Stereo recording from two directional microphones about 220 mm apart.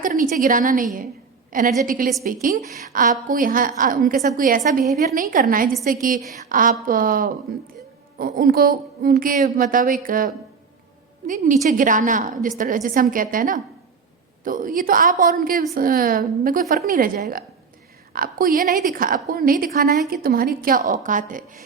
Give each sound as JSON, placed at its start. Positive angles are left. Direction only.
{"t": 0.0, "sound": "a woman's voice", "side_deg": -35}